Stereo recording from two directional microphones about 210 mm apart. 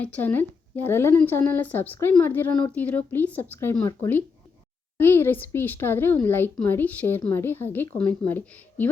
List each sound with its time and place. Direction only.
0.0 s a woman's voice: 10° left (ahead or behind)